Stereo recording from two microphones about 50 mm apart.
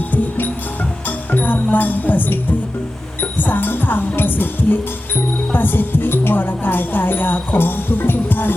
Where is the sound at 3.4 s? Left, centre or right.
Left.